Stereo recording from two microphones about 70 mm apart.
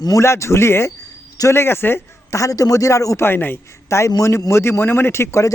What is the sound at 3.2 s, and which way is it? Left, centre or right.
Speech, left.